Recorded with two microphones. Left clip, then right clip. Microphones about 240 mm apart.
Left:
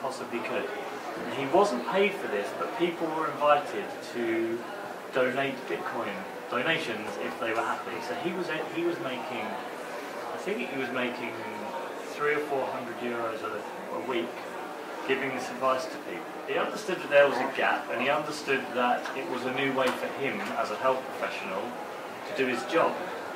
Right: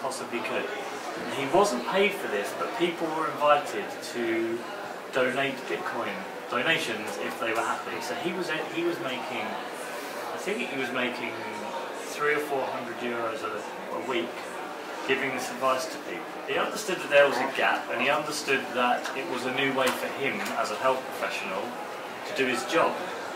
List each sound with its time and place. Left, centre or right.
0.3 s speech: centre
10.5 s speech: centre
12.2 s speech: centre
15.0 s speech: centre
22.4 s speech: centre